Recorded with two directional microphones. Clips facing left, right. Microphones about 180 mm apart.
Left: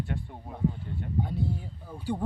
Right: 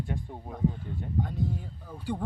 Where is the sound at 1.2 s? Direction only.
10° left (ahead or behind).